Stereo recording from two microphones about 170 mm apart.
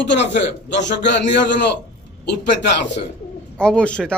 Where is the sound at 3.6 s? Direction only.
5° left (ahead or behind).